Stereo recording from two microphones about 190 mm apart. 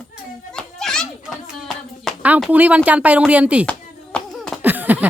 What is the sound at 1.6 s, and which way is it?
A woman's voice, 5° right (ahead or behind).